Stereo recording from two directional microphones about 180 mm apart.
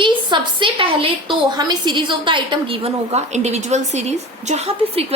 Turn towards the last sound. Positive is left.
turn(degrees=-35)  # may be behind; listen again after turning